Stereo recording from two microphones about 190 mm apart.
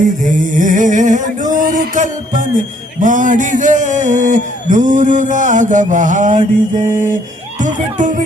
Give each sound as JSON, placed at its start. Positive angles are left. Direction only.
{"t": 0.0, "sound": "a sound", "side_deg": -40}
{"t": 1.5, "sound": "music", "side_deg": -45}
{"t": 3.0, "sound": "a man's voice", "side_deg": -40}